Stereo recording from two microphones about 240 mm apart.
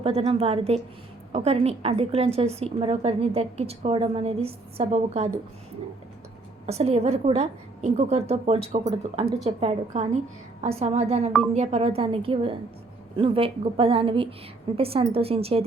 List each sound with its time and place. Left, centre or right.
0.0 s a woman's voice: right
6.7 s a woman's voice: right